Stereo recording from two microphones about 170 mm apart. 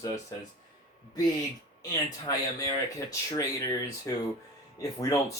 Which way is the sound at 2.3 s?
20° left (ahead or behind).